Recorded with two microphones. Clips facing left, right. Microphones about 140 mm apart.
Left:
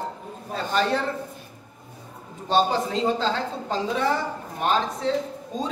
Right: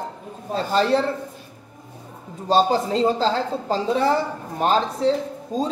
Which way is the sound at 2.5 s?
35° right (ahead or behind).